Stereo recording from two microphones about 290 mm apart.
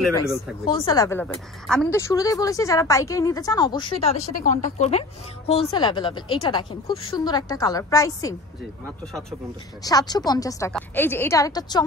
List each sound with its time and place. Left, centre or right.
0.0 s speech: centre
0.7 s a woman's voice: centre
9.8 s a woman's voice: centre